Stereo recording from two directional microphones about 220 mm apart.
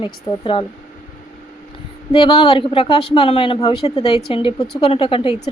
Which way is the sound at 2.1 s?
25° left (ahead or behind).